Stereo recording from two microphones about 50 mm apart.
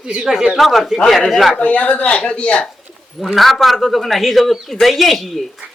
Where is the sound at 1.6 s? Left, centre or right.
Left.